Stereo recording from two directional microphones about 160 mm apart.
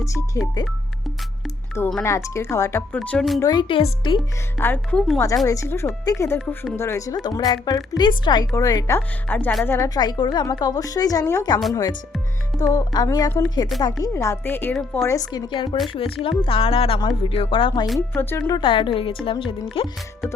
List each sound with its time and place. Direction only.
0.0 s speech: 20° left (ahead or behind)
2.0 s speech: 15° left (ahead or behind); by 3.4 s centre (ahead or behind)
3.4 s speech: 30° left (ahead or behind)
4.5 s speech: 15° left (ahead or behind)
5.5 s speech: 20° left (ahead or behind)
9.0 s speech: 10° left (ahead or behind)
15.0 s speech: 20° left (ahead or behind)
18.1 s speech: 15° left (ahead or behind)
18.4 s speech: 30° left (ahead or behind)